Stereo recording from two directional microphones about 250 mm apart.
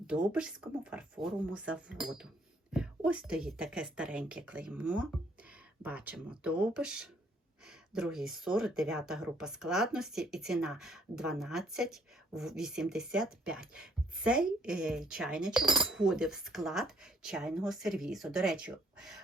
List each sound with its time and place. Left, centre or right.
0.1 s speech: centre